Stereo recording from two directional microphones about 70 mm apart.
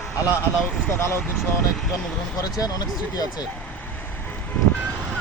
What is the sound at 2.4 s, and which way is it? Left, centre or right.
Speech, left.